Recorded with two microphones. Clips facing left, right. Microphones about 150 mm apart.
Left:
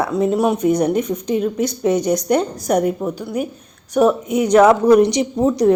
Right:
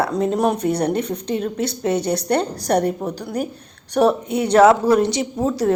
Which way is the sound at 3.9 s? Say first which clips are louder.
Left 2 dB; 35° right (ahead or behind).